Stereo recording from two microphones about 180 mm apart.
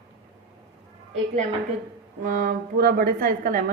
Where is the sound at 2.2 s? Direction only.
50° right (ahead or behind).